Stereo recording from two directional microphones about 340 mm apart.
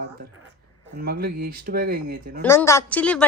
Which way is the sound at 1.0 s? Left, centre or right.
Right.